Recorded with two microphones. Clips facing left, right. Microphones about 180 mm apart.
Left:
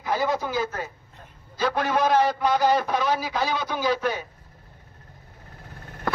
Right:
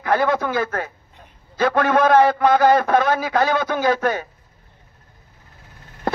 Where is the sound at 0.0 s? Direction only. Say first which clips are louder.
Right 6 dB; 65° right (ahead or behind).